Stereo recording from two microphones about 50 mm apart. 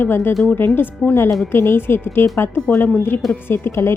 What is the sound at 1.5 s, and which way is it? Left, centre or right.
Speech, left.